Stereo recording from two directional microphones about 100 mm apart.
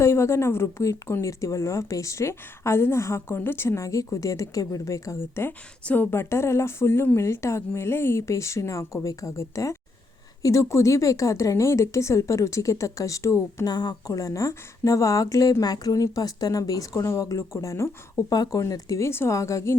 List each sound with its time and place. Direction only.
0.0 s a woman's voice: 30° left (ahead or behind)
13.7 s a woman's voice: 40° left (ahead or behind)